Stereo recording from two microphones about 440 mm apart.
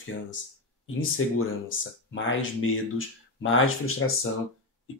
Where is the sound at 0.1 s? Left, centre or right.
Left.